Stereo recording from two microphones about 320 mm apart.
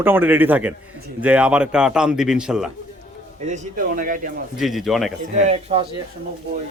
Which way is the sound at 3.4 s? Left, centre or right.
Right.